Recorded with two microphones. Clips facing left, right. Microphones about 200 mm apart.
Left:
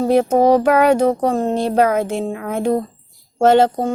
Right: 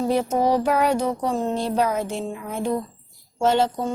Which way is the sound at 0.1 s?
55° left (ahead or behind).